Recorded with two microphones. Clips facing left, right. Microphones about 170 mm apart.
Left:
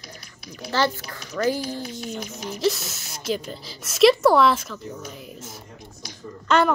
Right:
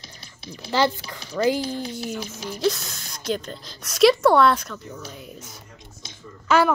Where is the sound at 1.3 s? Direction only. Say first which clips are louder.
Right 2 dB; 20° right (ahead or behind).